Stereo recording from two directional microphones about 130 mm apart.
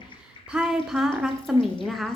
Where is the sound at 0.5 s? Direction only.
5° right (ahead or behind).